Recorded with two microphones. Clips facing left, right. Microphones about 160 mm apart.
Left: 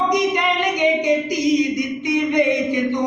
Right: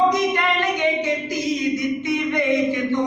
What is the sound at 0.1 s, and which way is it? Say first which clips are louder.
Speech: left 2 dB; 15° left (ahead or behind).